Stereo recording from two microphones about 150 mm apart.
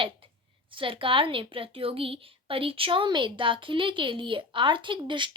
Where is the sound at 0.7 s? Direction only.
35° right (ahead or behind).